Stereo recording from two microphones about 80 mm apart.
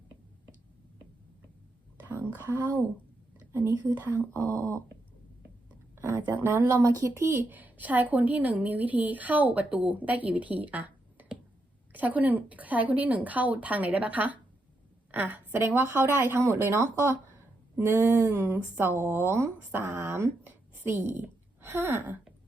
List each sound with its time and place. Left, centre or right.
2.0 s a sound: right
3.5 s speech: right
6.0 s speech: right
6.8 s a woman's voice: right